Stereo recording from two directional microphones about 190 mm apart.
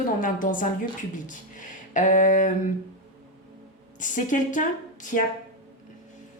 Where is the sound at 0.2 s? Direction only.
45° left (ahead or behind).